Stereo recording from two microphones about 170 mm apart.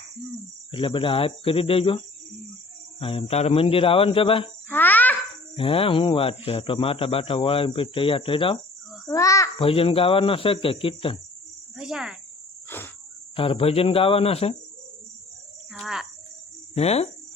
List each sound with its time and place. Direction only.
0.7 s speech: 30° left (ahead or behind)
3.0 s speech: 35° left (ahead or behind)
4.7 s a sound: 10° left (ahead or behind)
5.5 s speech: 30° left (ahead or behind)
9.0 s a child's voice: 20° left (ahead or behind)
9.6 s speech: 35° left (ahead or behind)
11.8 s cricket: 5° right (ahead or behind)
12.6 s cricket: 10° left (ahead or behind)
13.3 s speech: 30° left (ahead or behind)
15.7 s insect: centre (ahead or behind)
16.7 s speech: 40° left (ahead or behind)